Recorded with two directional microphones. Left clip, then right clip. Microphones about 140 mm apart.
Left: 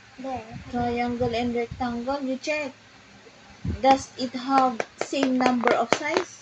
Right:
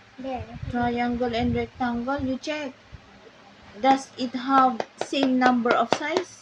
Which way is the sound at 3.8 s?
35° right (ahead or behind).